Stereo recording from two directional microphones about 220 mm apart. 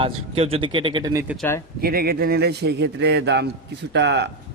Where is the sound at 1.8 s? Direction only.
45° right (ahead or behind).